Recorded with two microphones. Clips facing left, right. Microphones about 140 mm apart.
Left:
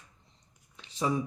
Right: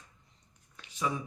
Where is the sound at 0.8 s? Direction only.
30° left (ahead or behind).